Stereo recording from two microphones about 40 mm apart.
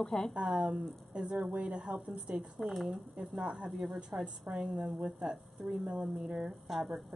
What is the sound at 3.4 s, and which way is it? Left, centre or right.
Speech, right.